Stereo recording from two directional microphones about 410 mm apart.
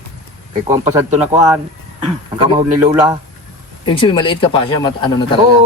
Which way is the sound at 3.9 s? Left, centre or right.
Centre.